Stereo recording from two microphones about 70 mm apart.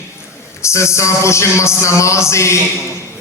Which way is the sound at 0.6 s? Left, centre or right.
Left.